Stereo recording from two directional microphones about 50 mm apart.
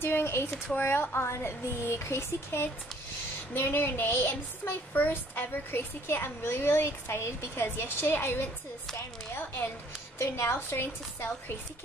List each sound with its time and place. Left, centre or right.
0.0 s a woman's voice: left
1.3 s speech: left
3.5 s a woman's voice: left
10.1 s speech: left